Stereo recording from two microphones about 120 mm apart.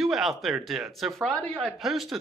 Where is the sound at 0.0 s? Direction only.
Centre (ahead or behind).